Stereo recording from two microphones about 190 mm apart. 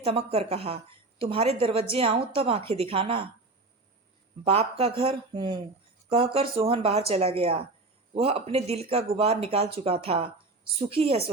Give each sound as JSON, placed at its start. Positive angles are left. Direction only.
{"t": 0.0, "sound": "a woman's voice", "side_deg": -30}
{"t": 4.4, "sound": "a woman's voice", "side_deg": -30}